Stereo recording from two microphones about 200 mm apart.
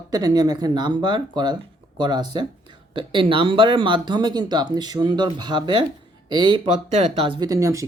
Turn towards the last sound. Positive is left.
turn(degrees=-15)  # may be behind; listen again after turning